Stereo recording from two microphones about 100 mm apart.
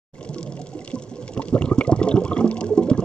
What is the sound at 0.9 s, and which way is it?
Water, 10° left (ahead or behind).